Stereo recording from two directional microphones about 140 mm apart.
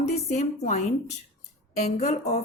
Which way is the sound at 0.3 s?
55° left (ahead or behind).